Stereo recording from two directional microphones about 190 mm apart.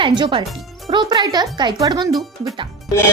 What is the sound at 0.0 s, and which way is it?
Speech, 25° right (ahead or behind).